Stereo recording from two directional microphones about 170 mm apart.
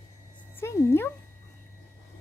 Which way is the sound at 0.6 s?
15° left (ahead or behind).